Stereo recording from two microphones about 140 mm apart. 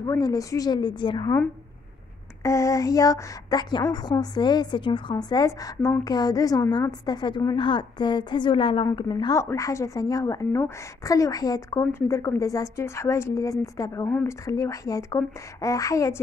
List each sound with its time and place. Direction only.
0.0 s a woman's voice: 25° left (ahead or behind)
2.4 s a woman's voice: 20° left (ahead or behind)
5.1 s a woman's voice: 25° left (ahead or behind)
9.4 s a woman's voice: 20° left (ahead or behind)